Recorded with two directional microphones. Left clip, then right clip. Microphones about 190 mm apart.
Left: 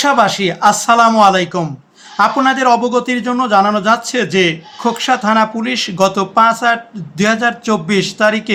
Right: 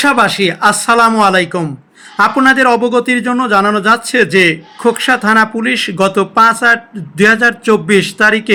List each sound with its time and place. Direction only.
0.0 s a man's voice: 20° right (ahead or behind)